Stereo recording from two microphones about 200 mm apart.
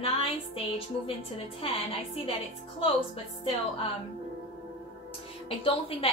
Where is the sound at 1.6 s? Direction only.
25° left (ahead or behind).